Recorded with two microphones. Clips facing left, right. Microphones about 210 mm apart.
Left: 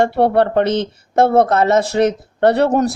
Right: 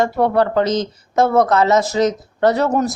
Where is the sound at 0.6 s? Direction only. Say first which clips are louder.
Left 1 dB; 60° left (ahead or behind).